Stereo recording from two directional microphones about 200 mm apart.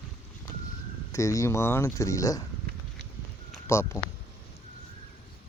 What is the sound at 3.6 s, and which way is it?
Speech, 15° left (ahead or behind).